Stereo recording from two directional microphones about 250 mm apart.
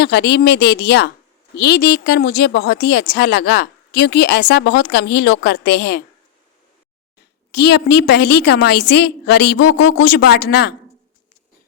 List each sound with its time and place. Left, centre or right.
0.0 s a woman's voice: left
7.5 s a woman's voice: left
9.6 s speech: left
10.0 s a woman's voice: left